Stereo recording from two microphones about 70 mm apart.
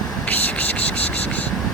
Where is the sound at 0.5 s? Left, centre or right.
Left.